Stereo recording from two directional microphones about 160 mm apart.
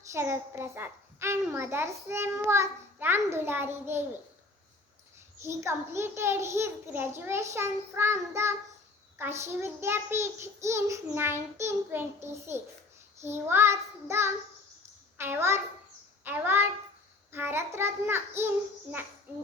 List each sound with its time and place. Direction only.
0.1 s a child's voice: 15° right (ahead or behind)
5.4 s a child's voice: 15° right (ahead or behind)